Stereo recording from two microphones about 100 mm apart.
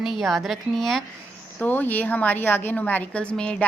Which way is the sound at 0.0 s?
Centre (ahead or behind).